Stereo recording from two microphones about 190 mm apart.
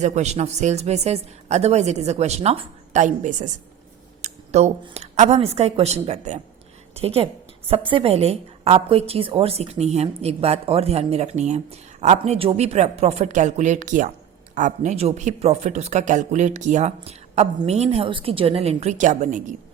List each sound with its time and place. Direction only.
0.0 s a woman's voice: 35° right (ahead or behind)